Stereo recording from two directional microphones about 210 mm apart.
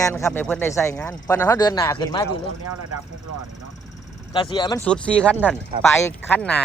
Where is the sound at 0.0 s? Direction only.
15° left (ahead or behind).